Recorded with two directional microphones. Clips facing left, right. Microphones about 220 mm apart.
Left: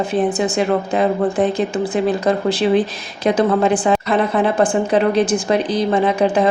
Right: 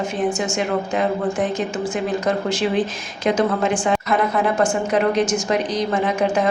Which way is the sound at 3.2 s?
35° left (ahead or behind).